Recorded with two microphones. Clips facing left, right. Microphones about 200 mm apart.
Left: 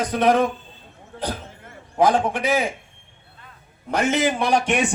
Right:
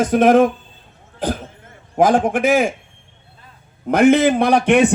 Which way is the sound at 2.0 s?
50° right (ahead or behind).